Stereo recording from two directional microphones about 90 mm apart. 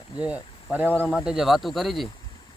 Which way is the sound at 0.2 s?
15° right (ahead or behind).